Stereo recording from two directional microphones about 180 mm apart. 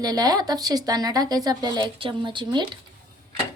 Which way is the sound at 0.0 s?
20° right (ahead or behind).